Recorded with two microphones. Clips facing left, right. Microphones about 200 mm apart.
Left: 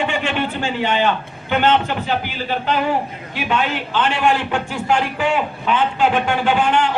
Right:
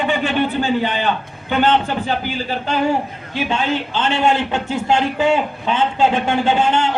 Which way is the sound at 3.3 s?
25° right (ahead or behind).